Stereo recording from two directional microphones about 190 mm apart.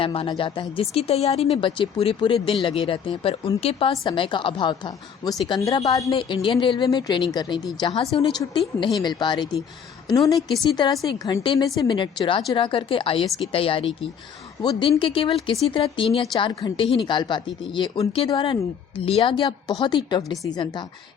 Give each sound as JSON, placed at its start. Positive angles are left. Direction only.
{"t": 0.0, "sound": "a woman's voice", "side_deg": 30}